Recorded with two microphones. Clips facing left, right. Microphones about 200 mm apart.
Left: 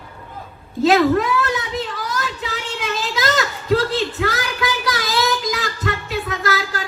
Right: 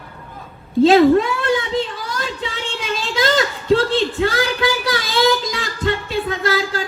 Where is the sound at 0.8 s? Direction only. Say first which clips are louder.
Right 4 dB; 30° right (ahead or behind).